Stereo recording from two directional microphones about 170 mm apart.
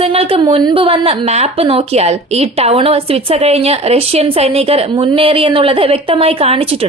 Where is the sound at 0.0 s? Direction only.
35° right (ahead or behind).